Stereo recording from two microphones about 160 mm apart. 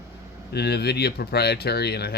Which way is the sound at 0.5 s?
90° left.